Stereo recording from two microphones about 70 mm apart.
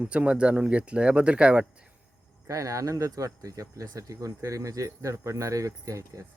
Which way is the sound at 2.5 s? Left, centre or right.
Right.